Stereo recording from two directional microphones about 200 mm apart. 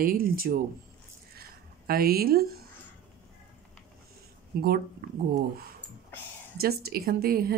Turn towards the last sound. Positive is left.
turn(degrees=-50)  # may be behind; listen again after turning